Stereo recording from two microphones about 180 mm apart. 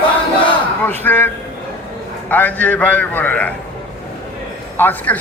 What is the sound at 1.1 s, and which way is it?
A man's voice, 10° left (ahead or behind).